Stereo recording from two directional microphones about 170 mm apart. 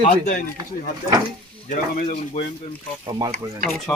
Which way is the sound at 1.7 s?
50° left (ahead or behind).